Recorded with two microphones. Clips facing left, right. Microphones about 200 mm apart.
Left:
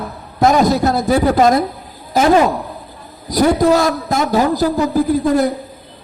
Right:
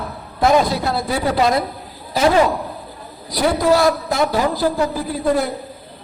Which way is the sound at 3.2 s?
45° left (ahead or behind).